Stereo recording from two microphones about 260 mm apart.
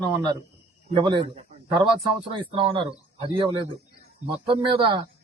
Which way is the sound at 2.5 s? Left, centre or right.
Centre.